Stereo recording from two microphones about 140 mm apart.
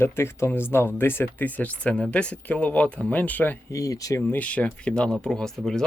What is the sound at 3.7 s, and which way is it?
Speech, 25° left (ahead or behind).